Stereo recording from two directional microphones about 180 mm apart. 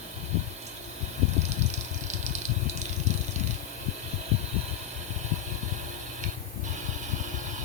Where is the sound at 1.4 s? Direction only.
40° right (ahead or behind).